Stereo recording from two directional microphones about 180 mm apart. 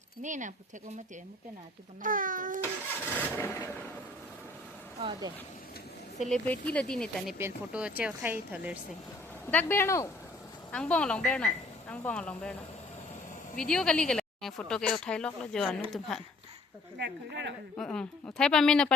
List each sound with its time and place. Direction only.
0.2 s speech: 45° right (ahead or behind)
2.0 s speech: 50° right (ahead or behind)
3.2 s a woman's voice: 10° left (ahead or behind)
4.9 s speech: 30° right (ahead or behind)
6.2 s speech: 5° left (ahead or behind)
7.3 s speech: 10° right (ahead or behind)
9.5 s a woman's voice: 10° left (ahead or behind)
13.6 s speech: 5° left (ahead or behind)
17.0 s speech: 75° right (ahead or behind)
17.7 s speech: 5° left (ahead or behind)